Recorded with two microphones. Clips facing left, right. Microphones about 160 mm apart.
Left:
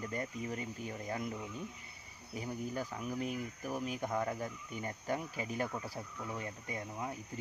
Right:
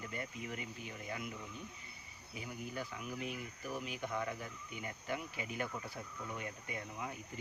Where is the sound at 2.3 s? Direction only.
40° left (ahead or behind).